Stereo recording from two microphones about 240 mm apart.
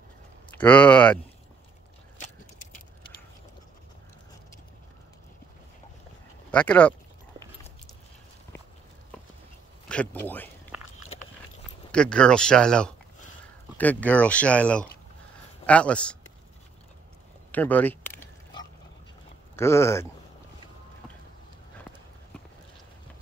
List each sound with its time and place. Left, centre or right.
0.6 s speech: centre
6.5 s speech: centre
9.8 s speech: centre
10.7 s walk: centre
11.9 s speech: centre
17.5 s speech: centre
18.2 s pig: centre
19.5 s speech: centre